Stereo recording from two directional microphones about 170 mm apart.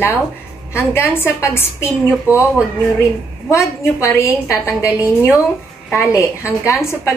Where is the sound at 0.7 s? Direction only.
15° left (ahead or behind).